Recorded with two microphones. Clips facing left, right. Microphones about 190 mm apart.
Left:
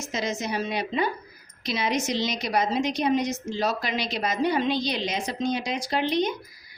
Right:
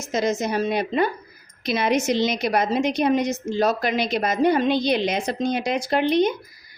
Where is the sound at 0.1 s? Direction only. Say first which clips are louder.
Right 7 dB; 45° right (ahead or behind).